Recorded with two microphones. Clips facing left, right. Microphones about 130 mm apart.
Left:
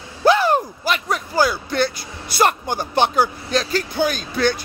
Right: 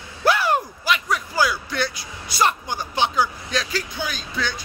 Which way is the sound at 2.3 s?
55° left (ahead or behind).